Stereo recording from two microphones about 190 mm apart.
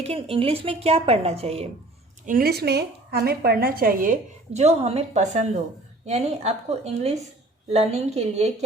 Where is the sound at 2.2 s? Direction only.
50° right (ahead or behind).